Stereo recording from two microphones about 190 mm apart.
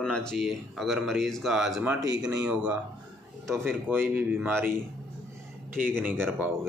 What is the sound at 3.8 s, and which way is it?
Speech, 10° right (ahead or behind).